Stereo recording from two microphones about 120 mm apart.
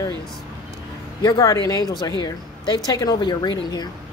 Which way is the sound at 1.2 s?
30° left (ahead or behind).